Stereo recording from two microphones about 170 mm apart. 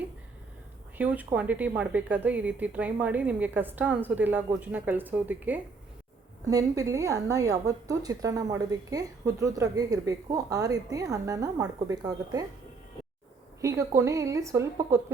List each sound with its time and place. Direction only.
0.9 s a woman's voice: 10° right (ahead or behind)
13.6 s speech: 15° right (ahead or behind)